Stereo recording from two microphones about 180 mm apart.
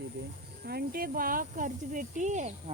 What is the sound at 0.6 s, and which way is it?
Speech, 60° right (ahead or behind).